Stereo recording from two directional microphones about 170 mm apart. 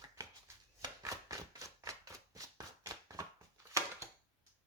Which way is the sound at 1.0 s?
20° right (ahead or behind).